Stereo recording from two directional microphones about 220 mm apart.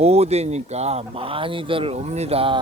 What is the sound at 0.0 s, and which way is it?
Speech, 30° right (ahead or behind).